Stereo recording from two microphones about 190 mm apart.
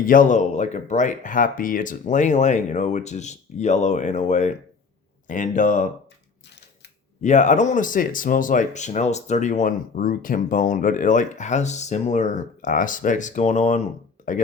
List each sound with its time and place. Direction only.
0.0 s speech: 45° left (ahead or behind)
7.2 s speech: 40° left (ahead or behind)
14.2 s a sound: 40° left (ahead or behind)